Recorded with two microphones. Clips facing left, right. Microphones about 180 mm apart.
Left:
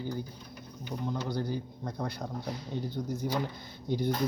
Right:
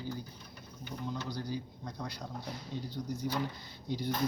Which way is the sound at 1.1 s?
55° left (ahead or behind).